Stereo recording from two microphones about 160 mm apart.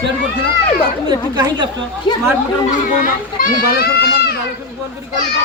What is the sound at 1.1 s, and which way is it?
Speech, 25° right (ahead or behind).